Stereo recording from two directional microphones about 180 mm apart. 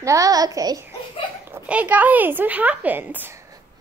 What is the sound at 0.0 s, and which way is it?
A woman's voice, 20° right (ahead or behind).